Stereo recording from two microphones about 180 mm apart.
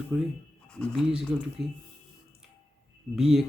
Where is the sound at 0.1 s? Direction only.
10° right (ahead or behind).